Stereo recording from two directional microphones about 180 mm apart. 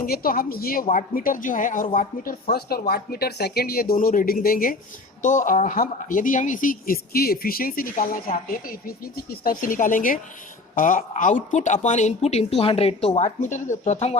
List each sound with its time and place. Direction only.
0.0 s a woman's voice: 55° left (ahead or behind); by 14.2 s 35° left (ahead or behind)